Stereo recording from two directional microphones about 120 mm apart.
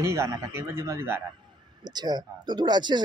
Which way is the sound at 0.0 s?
25° right (ahead or behind).